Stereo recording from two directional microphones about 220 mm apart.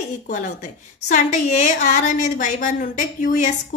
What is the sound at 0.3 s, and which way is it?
A woman's voice, 35° left (ahead or behind).